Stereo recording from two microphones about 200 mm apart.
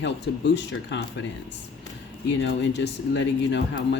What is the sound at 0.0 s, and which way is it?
A woman's voice, 60° left (ahead or behind).